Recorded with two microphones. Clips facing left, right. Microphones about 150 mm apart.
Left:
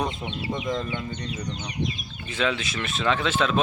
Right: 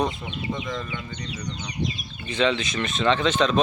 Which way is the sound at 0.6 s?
25° left (ahead or behind).